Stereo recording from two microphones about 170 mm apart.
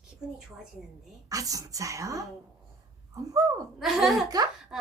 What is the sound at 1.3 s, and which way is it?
A woman's voice, 20° right (ahead or behind).